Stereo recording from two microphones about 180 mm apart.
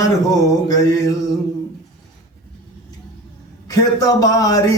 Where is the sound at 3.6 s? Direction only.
20° left (ahead or behind).